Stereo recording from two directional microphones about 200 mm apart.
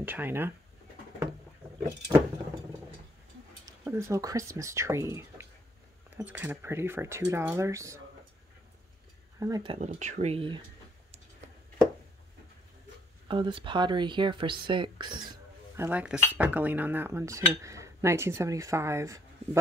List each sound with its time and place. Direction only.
0.0 s speech: 10° right (ahead or behind)
3.8 s speech: 15° right (ahead or behind)
9.4 s speech: 20° right (ahead or behind)
9.8 s speech: 35° right (ahead or behind)
13.3 s speech: 25° right (ahead or behind)